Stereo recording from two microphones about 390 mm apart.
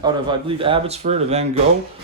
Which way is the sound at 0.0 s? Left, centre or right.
Centre.